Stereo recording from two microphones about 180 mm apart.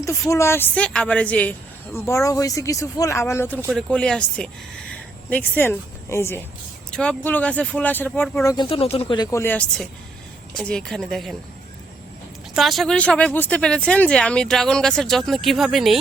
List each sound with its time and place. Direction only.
0.0 s a woman's voice: 15° left (ahead or behind)
8.4 s a woman's voice: 25° left (ahead or behind); by 11.3 s centre (ahead or behind)
12.5 s speech: centre (ahead or behind)